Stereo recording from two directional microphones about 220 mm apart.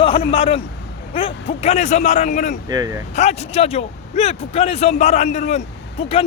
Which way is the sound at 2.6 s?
15° right (ahead or behind).